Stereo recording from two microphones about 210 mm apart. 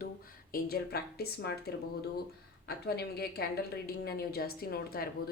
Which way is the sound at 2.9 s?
50° left (ahead or behind).